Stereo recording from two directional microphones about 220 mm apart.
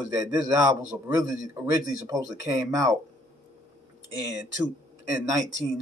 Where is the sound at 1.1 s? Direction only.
15° right (ahead or behind).